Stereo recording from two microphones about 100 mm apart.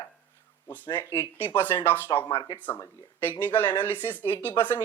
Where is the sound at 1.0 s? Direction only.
25° left (ahead or behind).